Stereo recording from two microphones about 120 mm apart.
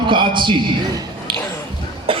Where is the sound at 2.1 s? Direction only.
50° right (ahead or behind).